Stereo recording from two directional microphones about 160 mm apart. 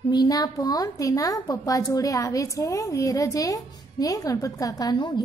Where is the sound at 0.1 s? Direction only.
25° left (ahead or behind).